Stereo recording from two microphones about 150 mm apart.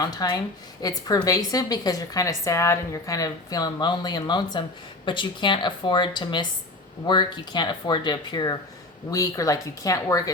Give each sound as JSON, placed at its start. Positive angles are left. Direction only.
{"t": 0.0, "sound": "a woman's voice", "side_deg": 25}